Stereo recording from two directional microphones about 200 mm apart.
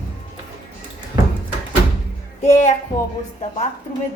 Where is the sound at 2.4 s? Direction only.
35° left (ahead or behind).